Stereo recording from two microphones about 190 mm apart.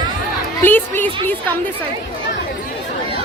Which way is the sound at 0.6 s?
10° left (ahead or behind).